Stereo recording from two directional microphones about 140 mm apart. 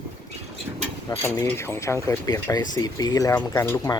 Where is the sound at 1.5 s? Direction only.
20° left (ahead or behind).